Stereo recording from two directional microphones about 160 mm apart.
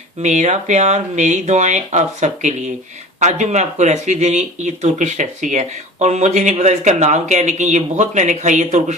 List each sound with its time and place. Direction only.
0.2 s speech: 45° right (ahead or behind)